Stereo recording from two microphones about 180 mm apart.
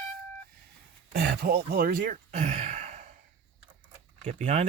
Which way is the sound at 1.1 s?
60° right (ahead or behind).